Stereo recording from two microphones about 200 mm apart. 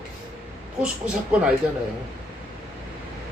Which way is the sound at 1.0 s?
5° right (ahead or behind).